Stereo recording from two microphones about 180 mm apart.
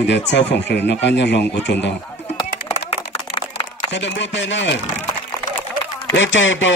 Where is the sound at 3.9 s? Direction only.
80° left.